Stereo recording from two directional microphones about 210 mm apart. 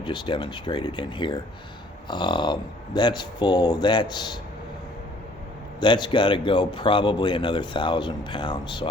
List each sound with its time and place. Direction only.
0.0 s speech: 20° left (ahead or behind)
5.8 s speech: 20° left (ahead or behind)